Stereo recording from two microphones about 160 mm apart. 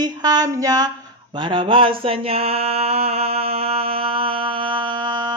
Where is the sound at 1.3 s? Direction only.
30° right (ahead or behind).